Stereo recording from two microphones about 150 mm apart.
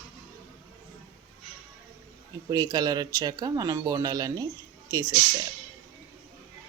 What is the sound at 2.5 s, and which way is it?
Speech, 25° right (ahead or behind).